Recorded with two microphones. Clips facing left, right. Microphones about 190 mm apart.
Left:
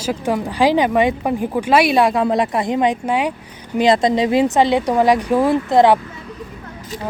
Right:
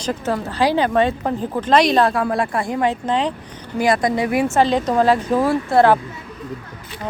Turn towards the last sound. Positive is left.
turn(degrees=15)  # may be behind; listen again after turning